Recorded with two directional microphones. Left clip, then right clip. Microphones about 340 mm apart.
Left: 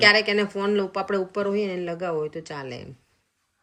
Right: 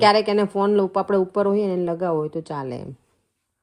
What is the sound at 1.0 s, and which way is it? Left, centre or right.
Speech, centre.